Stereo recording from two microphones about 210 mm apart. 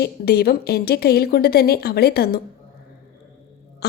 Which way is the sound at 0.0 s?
50° left (ahead or behind).